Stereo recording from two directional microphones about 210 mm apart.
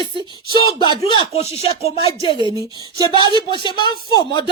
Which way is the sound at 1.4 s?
30° left (ahead or behind).